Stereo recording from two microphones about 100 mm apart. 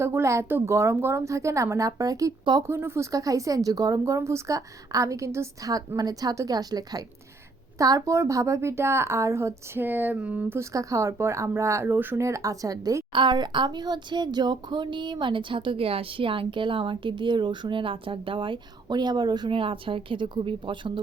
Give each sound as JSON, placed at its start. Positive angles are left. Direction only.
{"t": 0.0, "sound": "a woman's voice", "side_deg": -25}
{"t": 2.6, "sound": "a woman's voice", "side_deg": -25}
{"t": 10.6, "sound": "a woman's voice", "side_deg": -30}
{"t": 13.1, "sound": "speech", "side_deg": -50}